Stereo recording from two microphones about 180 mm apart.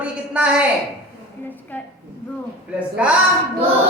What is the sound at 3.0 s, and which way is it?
Speech, 5° right (ahead or behind).